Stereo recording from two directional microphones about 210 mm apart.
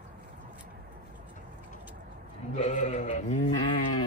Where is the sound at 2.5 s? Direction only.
35° left (ahead or behind).